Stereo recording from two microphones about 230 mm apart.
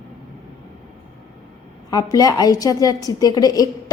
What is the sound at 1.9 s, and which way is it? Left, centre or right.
Speech, centre.